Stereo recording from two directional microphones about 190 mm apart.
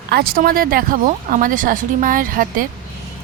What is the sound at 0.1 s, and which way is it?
A woman's voice, 50° right (ahead or behind).